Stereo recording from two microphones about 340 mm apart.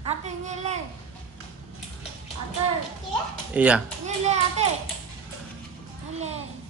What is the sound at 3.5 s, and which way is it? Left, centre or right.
Speech, centre.